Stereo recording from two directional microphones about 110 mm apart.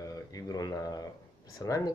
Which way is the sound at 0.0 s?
30° left (ahead or behind).